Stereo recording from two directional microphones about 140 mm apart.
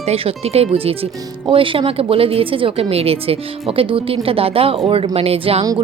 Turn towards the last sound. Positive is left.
turn(degrees=-45)  # may be behind; listen again after turning